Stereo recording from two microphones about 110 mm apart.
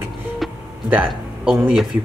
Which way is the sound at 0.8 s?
10° right (ahead or behind).